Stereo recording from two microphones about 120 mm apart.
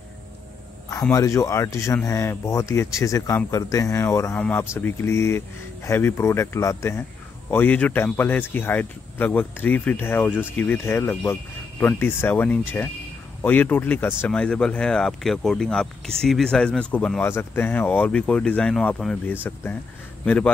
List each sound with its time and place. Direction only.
1.1 s speech: 25° left (ahead or behind)
4.4 s speech: 10° left (ahead or behind)
19.4 s speech: 20° left (ahead or behind)